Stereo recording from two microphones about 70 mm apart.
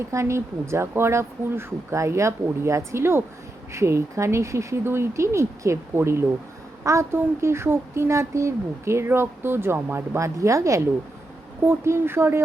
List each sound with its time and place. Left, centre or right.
0.0 s speech: right
10.2 s speech: right
11.6 s speech: right